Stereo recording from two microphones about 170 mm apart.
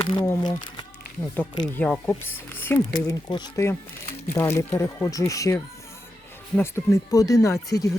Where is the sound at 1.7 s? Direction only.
10° left (ahead or behind).